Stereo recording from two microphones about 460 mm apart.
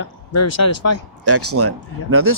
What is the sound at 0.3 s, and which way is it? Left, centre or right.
Speech, left.